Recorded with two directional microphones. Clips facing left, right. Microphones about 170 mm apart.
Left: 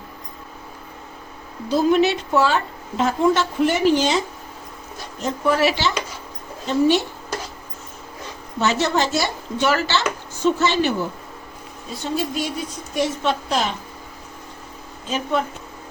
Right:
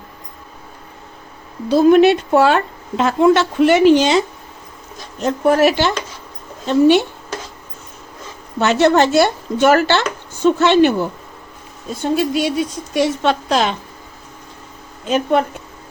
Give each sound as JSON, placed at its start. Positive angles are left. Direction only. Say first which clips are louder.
{"t": 1.7, "sound": "a woman's voice", "louder": "right 7 dB", "side_deg": -60}
{"t": 5.2, "sound": "speech", "louder": "right 6 dB", "side_deg": -50}
{"t": 6.7, "sound": "speech", "louder": "right 6 dB", "side_deg": -65}
{"t": 8.5, "sound": "speech", "louder": "right 7 dB", "side_deg": -60}
{"t": 10.4, "sound": "speech", "louder": "right 7 dB", "side_deg": -65}
{"t": 12.0, "sound": "a woman's voice", "louder": "right 7 dB", "side_deg": -70}
{"t": 15.0, "sound": "speech", "louder": "right 7 dB", "side_deg": -60}